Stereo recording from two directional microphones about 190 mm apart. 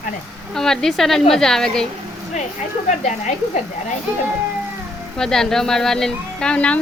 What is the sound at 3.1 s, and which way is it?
Speech, 40° left (ahead or behind).